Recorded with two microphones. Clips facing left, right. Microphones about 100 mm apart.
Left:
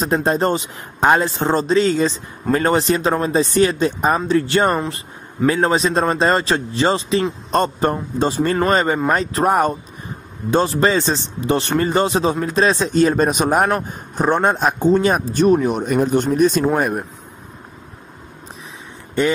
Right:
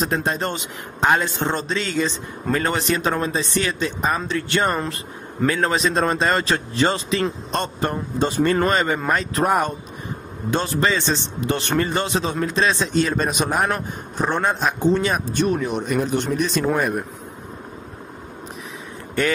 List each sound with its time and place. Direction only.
0.0 s a man's voice: 35° left (ahead or behind)
19.2 s speech: 20° left (ahead or behind)